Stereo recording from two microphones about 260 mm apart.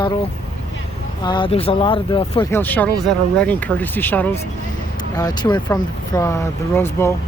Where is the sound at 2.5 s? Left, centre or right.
Centre.